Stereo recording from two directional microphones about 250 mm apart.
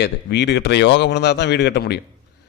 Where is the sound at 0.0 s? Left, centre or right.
Left.